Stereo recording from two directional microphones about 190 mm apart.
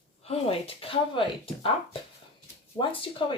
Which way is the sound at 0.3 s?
30° left (ahead or behind).